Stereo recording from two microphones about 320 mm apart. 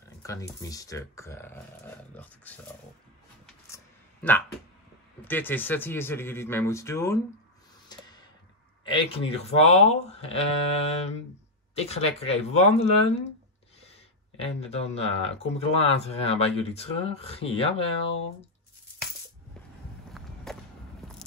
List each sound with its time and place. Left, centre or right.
0.2 s speech: centre
3.4 s a sound: centre
5.2 s speech: centre
7.9 s a sound: centre
8.8 s speech: centre
20.2 s skateboard: centre